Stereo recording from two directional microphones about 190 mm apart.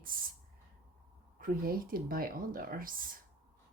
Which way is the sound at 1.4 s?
50° right (ahead or behind).